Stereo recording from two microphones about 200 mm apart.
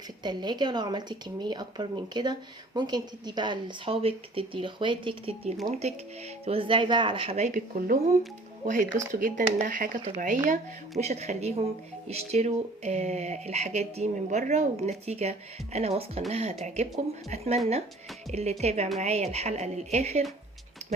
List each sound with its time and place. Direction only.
0.2 s a woman's voice: 20° right (ahead or behind)